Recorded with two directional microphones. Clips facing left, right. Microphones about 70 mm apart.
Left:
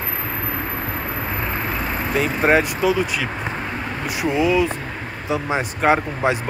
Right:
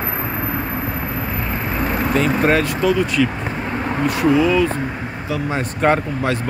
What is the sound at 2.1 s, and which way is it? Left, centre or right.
Speech, centre.